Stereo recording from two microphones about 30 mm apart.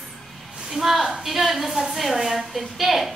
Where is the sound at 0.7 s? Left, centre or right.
Centre.